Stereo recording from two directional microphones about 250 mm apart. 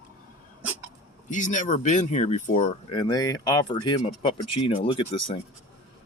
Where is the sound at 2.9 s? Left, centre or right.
Centre.